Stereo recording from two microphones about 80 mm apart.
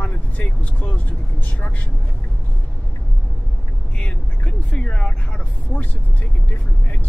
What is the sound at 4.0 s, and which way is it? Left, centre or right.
Speech, centre.